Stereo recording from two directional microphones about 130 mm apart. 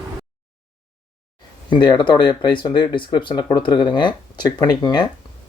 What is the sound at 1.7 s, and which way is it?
Speech, 35° left (ahead or behind).